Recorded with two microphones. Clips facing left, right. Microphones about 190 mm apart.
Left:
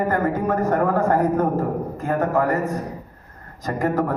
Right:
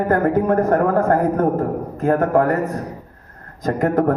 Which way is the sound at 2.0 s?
55° right (ahead or behind).